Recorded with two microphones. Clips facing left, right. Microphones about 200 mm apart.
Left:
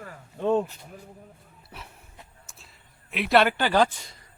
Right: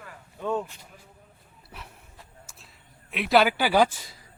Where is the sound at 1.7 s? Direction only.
Centre (ahead or behind).